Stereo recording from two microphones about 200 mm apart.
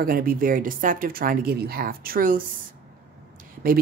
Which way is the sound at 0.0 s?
45° right (ahead or behind).